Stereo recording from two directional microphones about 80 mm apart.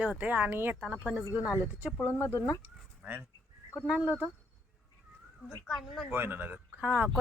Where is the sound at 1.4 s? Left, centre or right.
Left.